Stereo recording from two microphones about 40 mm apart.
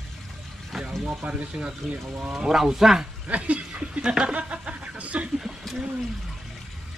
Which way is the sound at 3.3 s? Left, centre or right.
Right.